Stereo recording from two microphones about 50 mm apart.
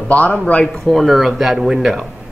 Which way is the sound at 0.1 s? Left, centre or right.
Left.